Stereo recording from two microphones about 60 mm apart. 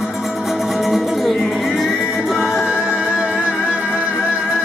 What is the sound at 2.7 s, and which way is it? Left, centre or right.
Music, centre.